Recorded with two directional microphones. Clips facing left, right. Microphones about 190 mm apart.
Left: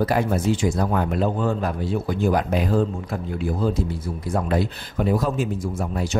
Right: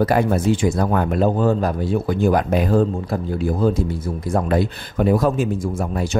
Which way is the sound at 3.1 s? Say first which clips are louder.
Right 5 dB; 35° right (ahead or behind).